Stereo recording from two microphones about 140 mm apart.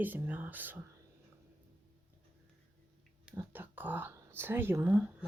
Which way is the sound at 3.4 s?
15° right (ahead or behind).